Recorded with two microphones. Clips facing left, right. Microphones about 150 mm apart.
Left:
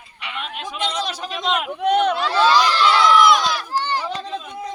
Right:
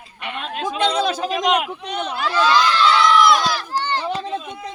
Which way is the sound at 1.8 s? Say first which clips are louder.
Left 9 dB; 60° left (ahead or behind).